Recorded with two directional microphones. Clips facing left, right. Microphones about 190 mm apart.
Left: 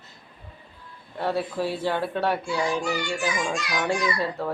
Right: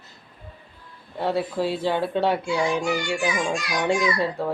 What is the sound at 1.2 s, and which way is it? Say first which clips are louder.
Speech: right 2 dB; 15° right (ahead or behind).